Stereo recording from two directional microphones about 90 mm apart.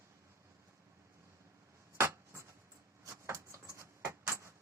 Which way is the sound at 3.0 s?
30° right (ahead or behind).